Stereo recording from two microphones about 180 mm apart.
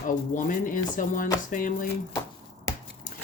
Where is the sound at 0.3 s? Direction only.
50° left (ahead or behind).